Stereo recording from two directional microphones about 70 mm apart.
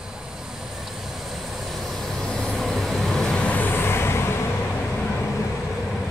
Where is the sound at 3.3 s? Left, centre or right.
Centre; by 4.3 s left.